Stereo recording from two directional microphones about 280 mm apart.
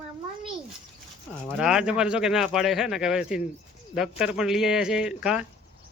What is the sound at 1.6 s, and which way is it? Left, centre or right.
Speech, centre.